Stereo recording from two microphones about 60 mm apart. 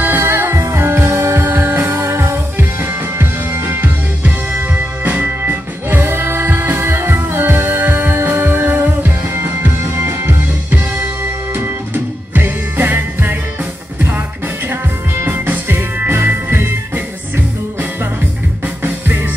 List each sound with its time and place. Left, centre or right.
0.0 s music: right
15.2 s music: right
18.8 s music: right